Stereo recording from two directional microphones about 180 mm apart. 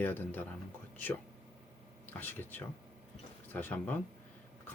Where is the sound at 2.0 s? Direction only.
10° left (ahead or behind).